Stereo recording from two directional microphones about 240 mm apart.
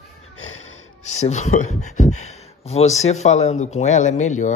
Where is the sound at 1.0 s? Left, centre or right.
Left.